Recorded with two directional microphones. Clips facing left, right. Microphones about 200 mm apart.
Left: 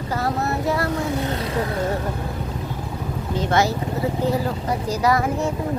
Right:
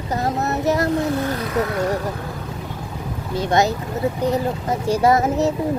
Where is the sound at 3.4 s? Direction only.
20° right (ahead or behind).